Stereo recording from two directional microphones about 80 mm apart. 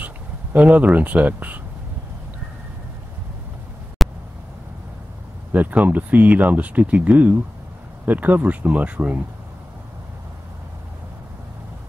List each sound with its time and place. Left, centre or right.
0.0 s speech: centre
4.0 s a sound: centre
5.5 s speech: right